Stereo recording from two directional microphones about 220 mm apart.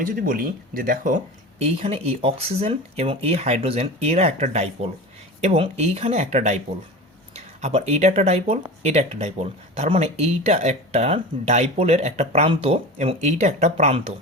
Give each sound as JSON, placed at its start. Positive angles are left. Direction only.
{"t": 0.1, "sound": "speech", "side_deg": -40}